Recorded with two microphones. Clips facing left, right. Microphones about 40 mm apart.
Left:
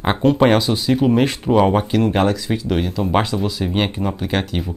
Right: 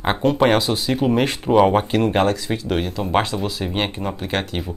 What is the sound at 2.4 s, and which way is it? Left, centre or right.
Speech, centre.